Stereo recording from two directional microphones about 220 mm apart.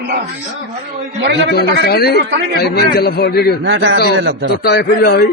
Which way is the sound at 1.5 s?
45° left (ahead or behind).